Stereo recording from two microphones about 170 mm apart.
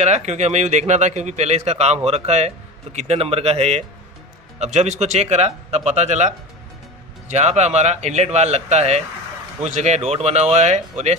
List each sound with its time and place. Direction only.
0.0 s a man's voice: 40° right (ahead or behind)